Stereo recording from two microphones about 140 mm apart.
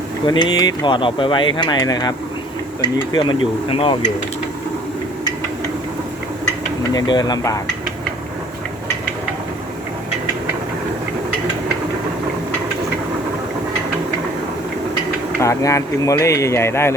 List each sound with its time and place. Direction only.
0.3 s speech: 30° left (ahead or behind)
3.2 s speech: 40° left (ahead or behind)
6.9 s speech: 30° left (ahead or behind)
15.4 s speech: 20° left (ahead or behind)